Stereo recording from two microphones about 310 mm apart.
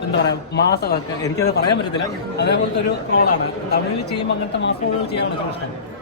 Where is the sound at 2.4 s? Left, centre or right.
Left.